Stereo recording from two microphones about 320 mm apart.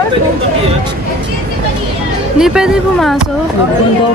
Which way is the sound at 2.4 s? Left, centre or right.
Centre.